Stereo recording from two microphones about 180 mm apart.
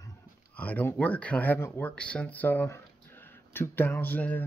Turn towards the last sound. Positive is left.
turn(degrees=10)  # may be behind; listen again after turning